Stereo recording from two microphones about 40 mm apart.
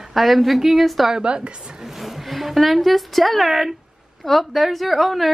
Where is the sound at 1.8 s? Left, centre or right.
Centre.